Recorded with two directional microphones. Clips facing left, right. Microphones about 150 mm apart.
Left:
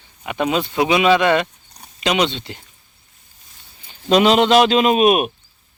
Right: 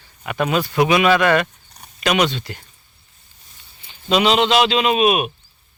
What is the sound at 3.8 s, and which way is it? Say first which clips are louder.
Speech: left 3 dB; 45° left (ahead or behind).